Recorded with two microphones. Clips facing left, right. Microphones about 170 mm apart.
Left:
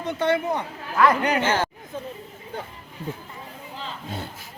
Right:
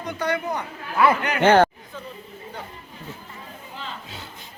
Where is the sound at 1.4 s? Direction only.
60° right (ahead or behind).